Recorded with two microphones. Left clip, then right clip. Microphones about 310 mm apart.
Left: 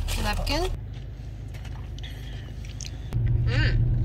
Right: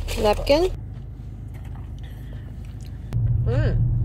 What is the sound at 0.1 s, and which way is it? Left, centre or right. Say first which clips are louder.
Speech: right 10 dB; left.